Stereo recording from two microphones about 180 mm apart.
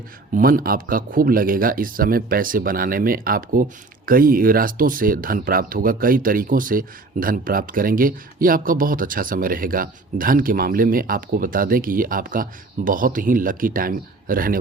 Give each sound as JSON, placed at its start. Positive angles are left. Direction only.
{"t": 0.3, "sound": "a man's voice", "side_deg": -50}